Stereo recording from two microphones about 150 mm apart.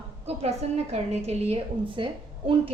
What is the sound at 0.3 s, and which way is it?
Speech, 45° right (ahead or behind).